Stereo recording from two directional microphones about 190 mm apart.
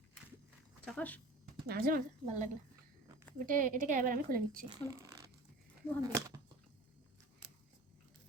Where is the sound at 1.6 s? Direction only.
50° right (ahead or behind).